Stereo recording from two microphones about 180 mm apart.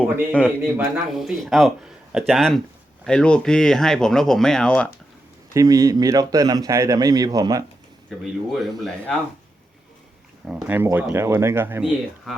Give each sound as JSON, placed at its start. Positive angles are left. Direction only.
{"t": 0.4, "sound": "speech", "side_deg": -10}
{"t": 5.5, "sound": "a man's voice", "side_deg": -20}
{"t": 8.2, "sound": "speech", "side_deg": 0}
{"t": 10.4, "sound": "speech", "side_deg": -5}